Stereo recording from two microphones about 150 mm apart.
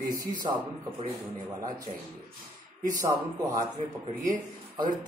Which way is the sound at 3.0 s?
25° right (ahead or behind).